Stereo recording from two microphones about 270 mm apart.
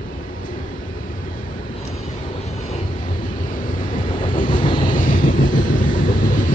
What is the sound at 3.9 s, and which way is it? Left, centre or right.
Vehicle, centre.